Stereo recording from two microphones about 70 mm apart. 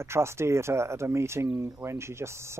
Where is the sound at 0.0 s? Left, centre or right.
Right.